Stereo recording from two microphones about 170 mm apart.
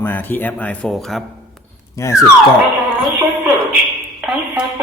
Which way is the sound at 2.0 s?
20° left (ahead or behind).